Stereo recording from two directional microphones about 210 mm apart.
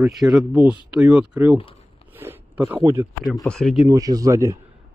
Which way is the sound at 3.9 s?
15° right (ahead or behind).